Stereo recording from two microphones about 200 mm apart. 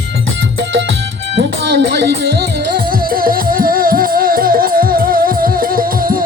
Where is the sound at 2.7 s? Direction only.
45° right (ahead or behind).